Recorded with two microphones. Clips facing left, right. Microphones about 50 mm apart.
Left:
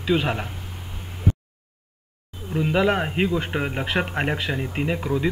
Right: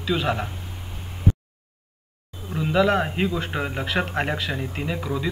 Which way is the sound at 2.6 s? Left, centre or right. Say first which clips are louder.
Right 1 dB; centre.